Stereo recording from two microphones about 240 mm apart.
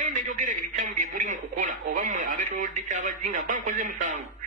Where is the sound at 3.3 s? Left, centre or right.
Right.